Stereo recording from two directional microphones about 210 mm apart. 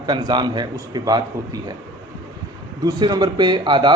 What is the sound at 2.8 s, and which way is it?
A man's voice, 20° right (ahead or behind).